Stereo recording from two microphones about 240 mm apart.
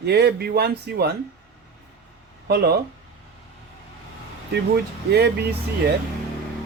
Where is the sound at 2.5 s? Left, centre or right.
Right.